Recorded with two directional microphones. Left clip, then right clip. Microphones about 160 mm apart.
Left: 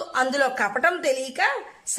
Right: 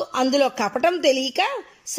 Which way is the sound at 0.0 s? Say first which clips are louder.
Right 2 dB; 15° right (ahead or behind).